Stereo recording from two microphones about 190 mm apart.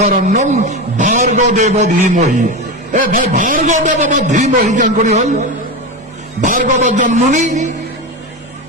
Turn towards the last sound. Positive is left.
turn(degrees=-40)  # may be behind; listen again after turning